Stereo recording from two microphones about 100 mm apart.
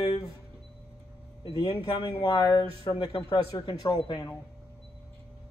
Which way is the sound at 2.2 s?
50° left (ahead or behind).